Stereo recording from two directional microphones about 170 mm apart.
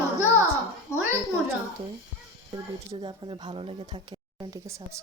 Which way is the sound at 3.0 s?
30° right (ahead or behind).